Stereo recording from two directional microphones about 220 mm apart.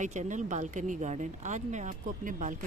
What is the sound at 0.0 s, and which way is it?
Speech, 35° right (ahead or behind).